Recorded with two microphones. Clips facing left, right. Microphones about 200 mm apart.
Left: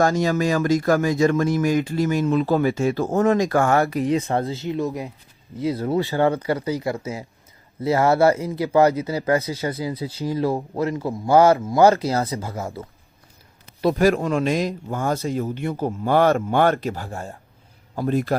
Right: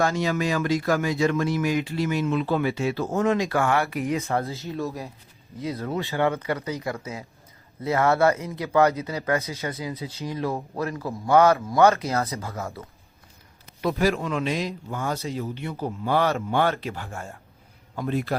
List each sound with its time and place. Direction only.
0.0 s speech: 45° left (ahead or behind)
4.7 s speech: 15° left (ahead or behind)
5.5 s speech: 30° left (ahead or behind)
13.8 s a man's voice: 45° left (ahead or behind)